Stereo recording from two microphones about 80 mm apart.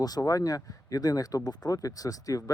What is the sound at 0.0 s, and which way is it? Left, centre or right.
Speech, left.